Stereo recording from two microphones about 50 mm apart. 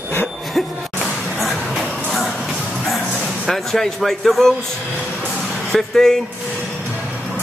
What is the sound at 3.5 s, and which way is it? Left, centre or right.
Music, centre.